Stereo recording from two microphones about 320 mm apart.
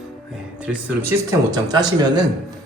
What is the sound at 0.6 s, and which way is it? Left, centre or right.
A man's voice, centre.